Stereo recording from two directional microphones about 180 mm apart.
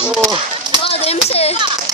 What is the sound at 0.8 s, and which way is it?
Speech, 35° left (ahead or behind).